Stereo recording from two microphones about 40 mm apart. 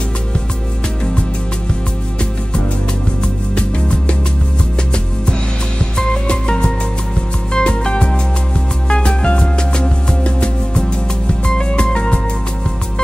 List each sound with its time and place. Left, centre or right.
3.5 s music: left
5.9 s music: left